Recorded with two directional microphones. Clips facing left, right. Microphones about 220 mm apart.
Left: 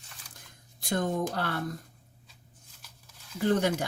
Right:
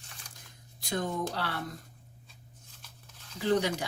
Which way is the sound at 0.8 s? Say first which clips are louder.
Left 3 dB; 50° left (ahead or behind).